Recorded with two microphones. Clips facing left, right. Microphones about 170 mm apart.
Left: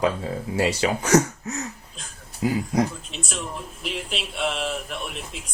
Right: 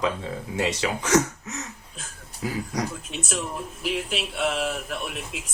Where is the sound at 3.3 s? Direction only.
5° right (ahead or behind).